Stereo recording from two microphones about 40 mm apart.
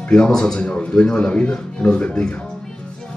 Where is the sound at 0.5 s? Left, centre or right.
Left.